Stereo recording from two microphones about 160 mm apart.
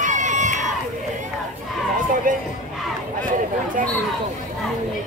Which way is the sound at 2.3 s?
60° right (ahead or behind).